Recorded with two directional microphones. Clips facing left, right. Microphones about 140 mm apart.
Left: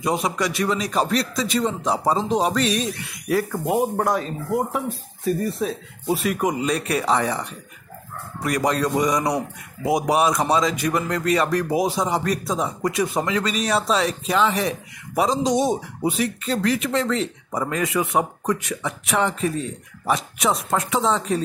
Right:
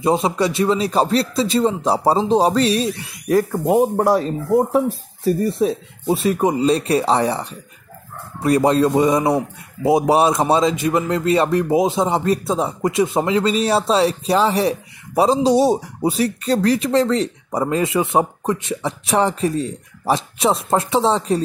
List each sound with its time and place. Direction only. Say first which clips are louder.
0.0 s speech: right 5 dB; 25° right (ahead or behind)